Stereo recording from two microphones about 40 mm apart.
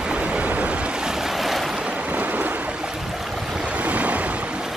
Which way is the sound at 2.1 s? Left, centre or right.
Right.